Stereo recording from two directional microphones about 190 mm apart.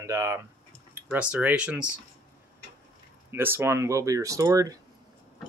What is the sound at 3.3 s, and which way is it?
Speech, 10° right (ahead or behind).